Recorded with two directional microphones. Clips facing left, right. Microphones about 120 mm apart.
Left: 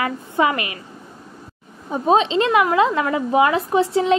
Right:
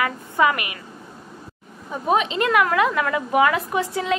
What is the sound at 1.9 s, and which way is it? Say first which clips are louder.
A woman's voice: left 5 dB; 25° left (ahead or behind).